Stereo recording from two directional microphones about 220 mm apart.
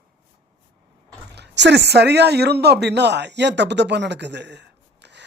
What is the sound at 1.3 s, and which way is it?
Speech, 50° right (ahead or behind).